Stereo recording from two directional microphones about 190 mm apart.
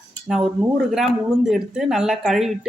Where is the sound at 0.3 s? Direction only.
Centre (ahead or behind).